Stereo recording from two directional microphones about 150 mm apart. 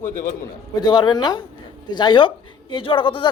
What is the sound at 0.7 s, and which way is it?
A woman's voice, 30° left (ahead or behind).